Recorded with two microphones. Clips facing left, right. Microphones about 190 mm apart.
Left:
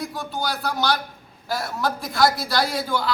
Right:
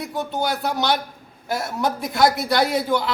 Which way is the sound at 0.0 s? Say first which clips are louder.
Right 3 dB; 20° right (ahead or behind).